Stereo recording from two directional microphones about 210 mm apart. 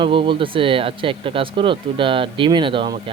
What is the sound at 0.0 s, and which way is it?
Speech, 25° right (ahead or behind).